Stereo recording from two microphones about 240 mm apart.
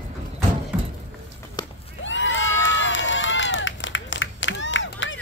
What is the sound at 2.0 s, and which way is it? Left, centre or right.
Run, left.